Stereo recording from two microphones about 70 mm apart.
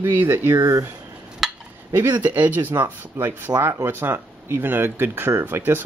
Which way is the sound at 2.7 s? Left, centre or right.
Right.